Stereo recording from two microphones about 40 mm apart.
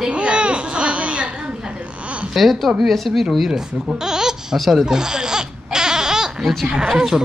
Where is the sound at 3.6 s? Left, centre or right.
Centre.